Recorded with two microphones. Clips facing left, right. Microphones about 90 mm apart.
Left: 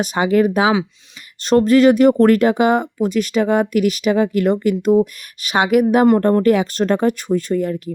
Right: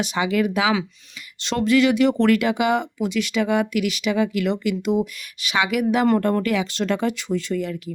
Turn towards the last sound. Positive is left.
turn(degrees=45)  # may be behind; listen again after turning